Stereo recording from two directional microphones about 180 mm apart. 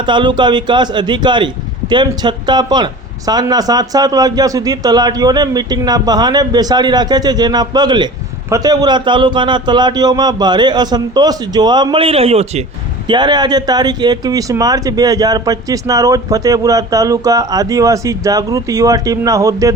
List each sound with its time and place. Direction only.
0.0 s a man's voice: 25° right (ahead or behind)
13.1 s a man's voice: 25° right (ahead or behind)